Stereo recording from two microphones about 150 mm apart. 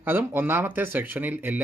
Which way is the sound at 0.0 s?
15° right (ahead or behind).